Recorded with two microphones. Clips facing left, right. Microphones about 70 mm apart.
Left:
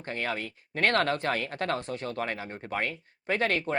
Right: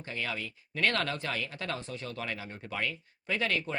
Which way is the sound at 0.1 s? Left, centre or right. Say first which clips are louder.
Left 4 dB; left.